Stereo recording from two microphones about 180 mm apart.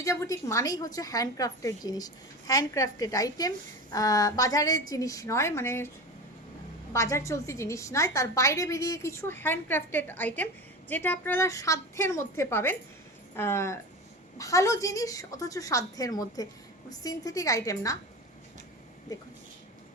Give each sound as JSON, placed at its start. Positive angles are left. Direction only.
{"t": 0.0, "sound": "a woman's voice", "side_deg": 15}
{"t": 6.9, "sound": "a woman's voice", "side_deg": 15}
{"t": 19.1, "sound": "a woman's voice", "side_deg": 20}